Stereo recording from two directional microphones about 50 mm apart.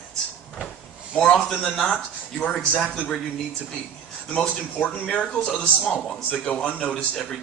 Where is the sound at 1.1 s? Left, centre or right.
Centre.